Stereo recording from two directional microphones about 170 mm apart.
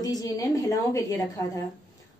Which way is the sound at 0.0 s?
20° left (ahead or behind).